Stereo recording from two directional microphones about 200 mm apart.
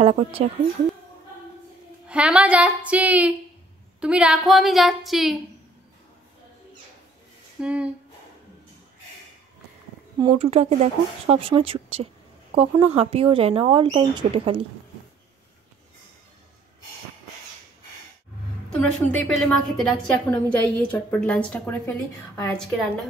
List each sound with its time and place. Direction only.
0.0 s speech: 30° right (ahead or behind)
2.0 s a woman's voice: 5° right (ahead or behind)
7.6 s a woman's voice: 5° right (ahead or behind)
10.1 s speech: 25° right (ahead or behind)
18.8 s a woman's voice: 5° left (ahead or behind)